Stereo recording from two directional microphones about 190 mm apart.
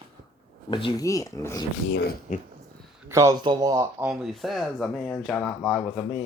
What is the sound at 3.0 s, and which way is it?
Speech, 15° right (ahead or behind).